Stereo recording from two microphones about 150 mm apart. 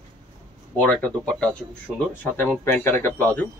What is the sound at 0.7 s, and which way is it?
Speech, 10° left (ahead or behind).